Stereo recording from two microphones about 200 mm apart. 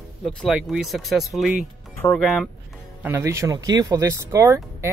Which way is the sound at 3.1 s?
15° right (ahead or behind).